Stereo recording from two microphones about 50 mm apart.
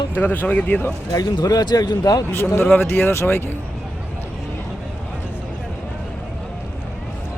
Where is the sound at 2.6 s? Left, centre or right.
Left.